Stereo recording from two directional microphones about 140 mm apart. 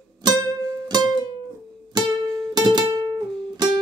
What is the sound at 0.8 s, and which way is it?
Music, 30° right (ahead or behind).